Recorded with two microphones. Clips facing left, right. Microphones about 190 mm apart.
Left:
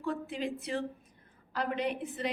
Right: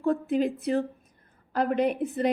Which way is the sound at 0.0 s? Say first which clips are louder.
Right 10 dB; 50° right (ahead or behind).